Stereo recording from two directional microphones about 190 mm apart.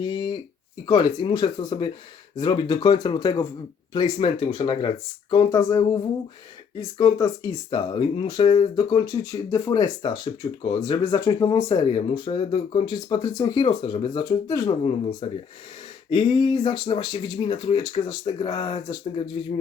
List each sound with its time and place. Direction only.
0.0 s a sound: 25° left (ahead or behind)
0.9 s speech: 20° left (ahead or behind)
14.8 s speech: 30° left (ahead or behind)